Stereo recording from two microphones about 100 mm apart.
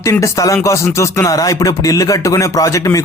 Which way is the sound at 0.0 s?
30° left (ahead or behind).